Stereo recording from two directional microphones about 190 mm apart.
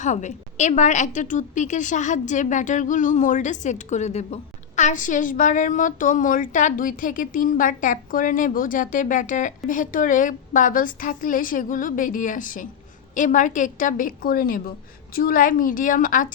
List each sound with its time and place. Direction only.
0.0 s a woman's voice: 40° left (ahead or behind)